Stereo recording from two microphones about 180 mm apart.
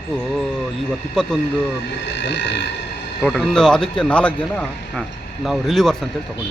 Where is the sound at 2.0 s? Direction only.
75° left (ahead or behind).